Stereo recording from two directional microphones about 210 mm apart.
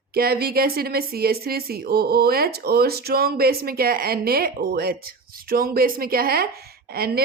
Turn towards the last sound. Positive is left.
turn(degrees=-45)  # may be behind; listen again after turning